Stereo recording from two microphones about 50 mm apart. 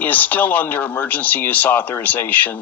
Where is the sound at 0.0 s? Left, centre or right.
Left.